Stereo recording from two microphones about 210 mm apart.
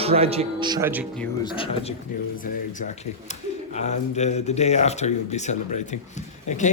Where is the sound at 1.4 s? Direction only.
25° left (ahead or behind).